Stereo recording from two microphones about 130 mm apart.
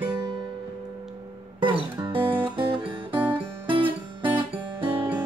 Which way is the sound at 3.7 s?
40° right (ahead or behind).